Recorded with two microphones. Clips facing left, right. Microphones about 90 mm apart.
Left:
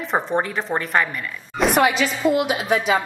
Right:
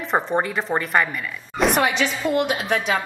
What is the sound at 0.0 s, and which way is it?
A woman's voice, centre (ahead or behind).